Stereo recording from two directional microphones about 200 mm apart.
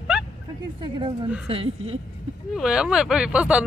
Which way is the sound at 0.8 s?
25° right (ahead or behind).